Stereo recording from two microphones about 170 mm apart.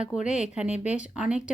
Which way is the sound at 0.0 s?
5° right (ahead or behind).